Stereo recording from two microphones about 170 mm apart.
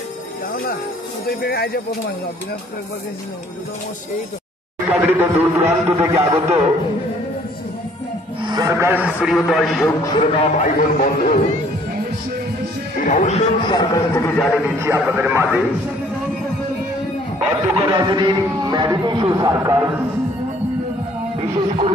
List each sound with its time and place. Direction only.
1.4 s speech: 65° left (ahead or behind)
4.8 s a man's voice: 10° right (ahead or behind)
6.3 s music: 40° right (ahead or behind)
8.5 s a man's voice: 20° right (ahead or behind); by 9.8 s centre (ahead or behind)
9.8 s speech: 25° left (ahead or behind)
10.6 s speech: 50° left (ahead or behind)
13.0 s speech: 50° left (ahead or behind)
13.7 s speech: 20° left (ahead or behind)
14.8 s a man's voice: 10° right (ahead or behind)
17.7 s speech: 25° right (ahead or behind)
21.4 s speech: 30° right (ahead or behind)